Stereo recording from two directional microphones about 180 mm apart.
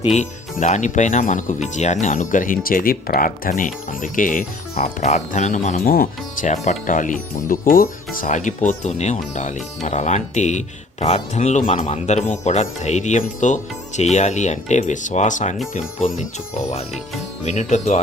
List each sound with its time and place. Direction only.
0.0 s speech: 40° left (ahead or behind)
17.4 s speech: 40° left (ahead or behind)